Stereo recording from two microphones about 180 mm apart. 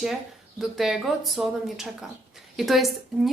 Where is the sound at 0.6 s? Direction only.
Centre (ahead or behind).